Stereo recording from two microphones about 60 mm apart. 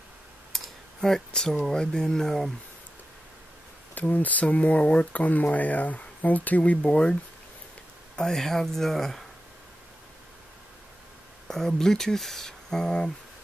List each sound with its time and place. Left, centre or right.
0.5 s clicking: centre
1.0 s speech: centre
4.0 s speech: left
8.2 s speech: centre
11.4 s speech: centre